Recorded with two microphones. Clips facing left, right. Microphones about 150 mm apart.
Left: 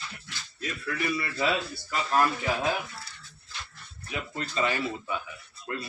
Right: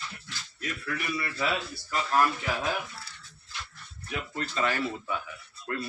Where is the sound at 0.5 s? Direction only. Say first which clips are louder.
Left 2 dB; 25° left (ahead or behind).